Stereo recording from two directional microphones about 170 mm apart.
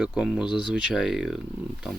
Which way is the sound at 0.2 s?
5° right (ahead or behind).